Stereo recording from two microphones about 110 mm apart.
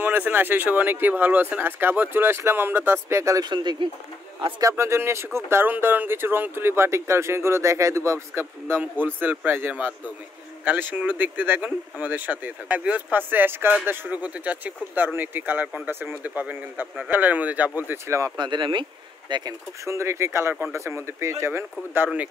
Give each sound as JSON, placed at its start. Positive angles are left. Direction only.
{"t": 0.0, "sound": "speech", "side_deg": -15}
{"t": 3.4, "sound": "speech", "side_deg": -40}
{"t": 4.6, "sound": "speech", "side_deg": -30}
{"t": 18.4, "sound": "speech", "side_deg": -45}
{"t": 19.9, "sound": "speech", "side_deg": -25}